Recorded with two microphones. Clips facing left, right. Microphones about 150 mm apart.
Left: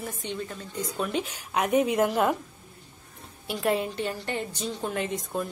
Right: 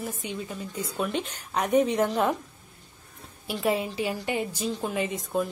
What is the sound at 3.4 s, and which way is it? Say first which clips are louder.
A woman's voice: even; centre (ahead or behind).